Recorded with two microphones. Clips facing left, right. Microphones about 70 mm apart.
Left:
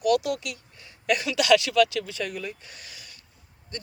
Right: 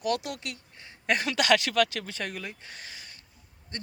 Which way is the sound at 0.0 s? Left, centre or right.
Right.